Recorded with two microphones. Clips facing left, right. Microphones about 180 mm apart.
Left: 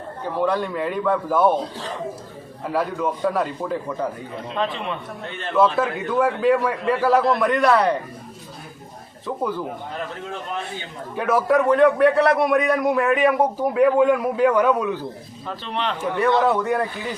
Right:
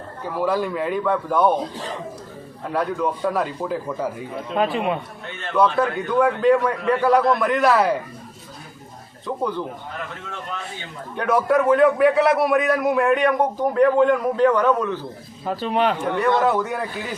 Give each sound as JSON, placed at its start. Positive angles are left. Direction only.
{"t": 0.3, "sound": "a man's voice", "side_deg": -5}
{"t": 2.6, "sound": "a man's voice", "side_deg": 0}
{"t": 5.5, "sound": "a man's voice", "side_deg": 0}
{"t": 9.2, "sound": "a man's voice", "side_deg": 5}
{"t": 11.1, "sound": "a man's voice", "side_deg": 0}
{"t": 15.4, "sound": "speech", "side_deg": -45}
{"t": 16.1, "sound": "a man's voice", "side_deg": 0}